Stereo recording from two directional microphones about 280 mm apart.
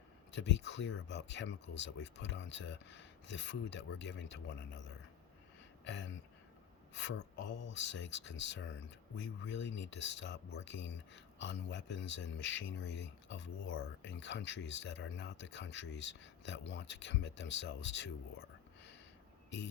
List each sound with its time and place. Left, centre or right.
0.3 s speech: left
5.8 s speech: left
9.8 s speech: left